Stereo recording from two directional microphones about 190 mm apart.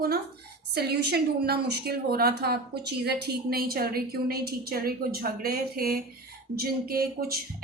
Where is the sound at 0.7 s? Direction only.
55° right (ahead or behind).